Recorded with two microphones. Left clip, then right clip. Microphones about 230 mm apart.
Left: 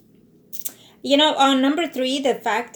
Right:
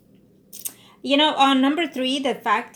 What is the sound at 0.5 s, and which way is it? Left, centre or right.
A woman's voice, right.